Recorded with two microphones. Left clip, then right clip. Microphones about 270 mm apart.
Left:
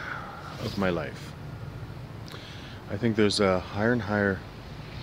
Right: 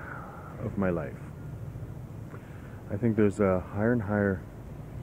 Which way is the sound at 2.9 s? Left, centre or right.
Centre.